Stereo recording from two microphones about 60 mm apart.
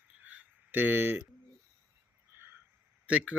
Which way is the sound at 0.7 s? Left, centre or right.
Right.